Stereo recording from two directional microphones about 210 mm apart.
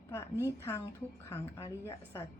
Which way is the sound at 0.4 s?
10° left (ahead or behind).